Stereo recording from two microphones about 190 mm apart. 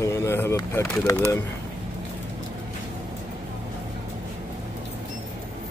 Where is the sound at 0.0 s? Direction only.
15° left (ahead or behind).